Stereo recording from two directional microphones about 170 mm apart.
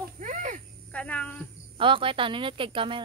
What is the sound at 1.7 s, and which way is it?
Speech, 30° right (ahead or behind).